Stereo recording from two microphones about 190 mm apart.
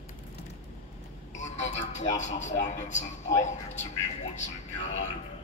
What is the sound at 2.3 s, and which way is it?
A man's voice, 40° left (ahead or behind).